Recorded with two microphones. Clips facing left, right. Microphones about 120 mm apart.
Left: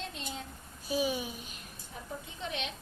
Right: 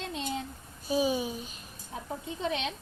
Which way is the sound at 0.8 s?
25° right (ahead or behind).